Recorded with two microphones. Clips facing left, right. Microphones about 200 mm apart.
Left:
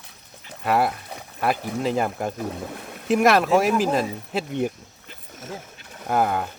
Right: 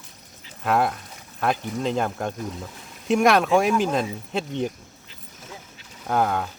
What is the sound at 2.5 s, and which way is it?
Speech, 60° left (ahead or behind).